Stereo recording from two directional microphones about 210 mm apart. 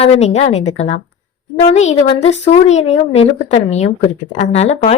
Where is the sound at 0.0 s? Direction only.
30° left (ahead or behind).